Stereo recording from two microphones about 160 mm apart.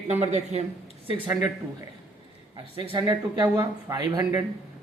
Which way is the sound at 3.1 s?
20° right (ahead or behind).